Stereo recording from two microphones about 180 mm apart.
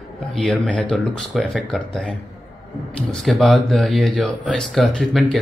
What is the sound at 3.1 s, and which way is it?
Speech, centre (ahead or behind).